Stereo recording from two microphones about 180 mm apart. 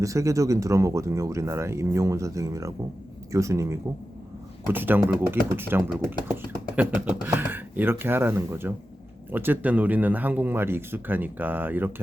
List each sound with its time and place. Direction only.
0.0 s speech: 15° right (ahead or behind)